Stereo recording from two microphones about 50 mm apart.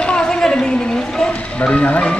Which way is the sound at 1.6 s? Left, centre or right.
Left.